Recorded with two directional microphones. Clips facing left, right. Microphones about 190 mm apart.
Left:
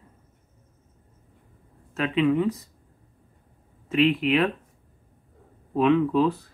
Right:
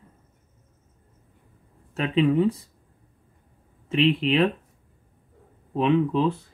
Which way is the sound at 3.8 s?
30° right (ahead or behind).